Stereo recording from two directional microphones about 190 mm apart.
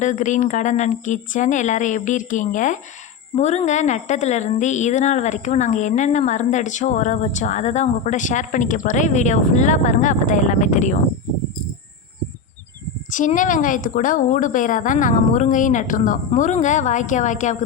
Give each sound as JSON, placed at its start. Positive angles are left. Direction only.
{"t": 0.0, "sound": "a woman's voice", "side_deg": 40}
{"t": 13.1, "sound": "a woman's voice", "side_deg": 45}